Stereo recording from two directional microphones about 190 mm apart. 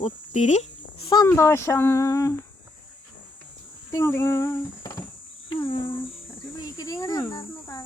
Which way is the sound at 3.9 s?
15° left (ahead or behind).